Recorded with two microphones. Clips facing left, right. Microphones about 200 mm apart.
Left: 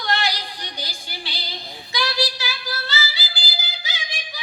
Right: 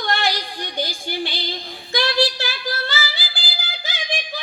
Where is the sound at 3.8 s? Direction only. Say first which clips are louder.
Right 7 dB; 50° right (ahead or behind).